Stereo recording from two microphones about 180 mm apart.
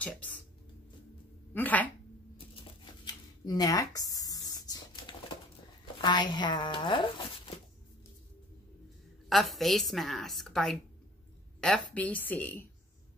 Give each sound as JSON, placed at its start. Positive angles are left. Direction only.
{"t": 0.0, "sound": "a woman's voice", "side_deg": 10}
{"t": 1.5, "sound": "speech", "side_deg": 10}
{"t": 3.4, "sound": "tearing", "side_deg": 20}
{"t": 5.9, "sound": "speech", "side_deg": 25}
{"t": 9.3, "sound": "a woman's voice", "side_deg": 0}